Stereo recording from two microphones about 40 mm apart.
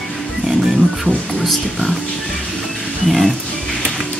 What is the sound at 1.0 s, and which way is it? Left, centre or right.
Speech, centre.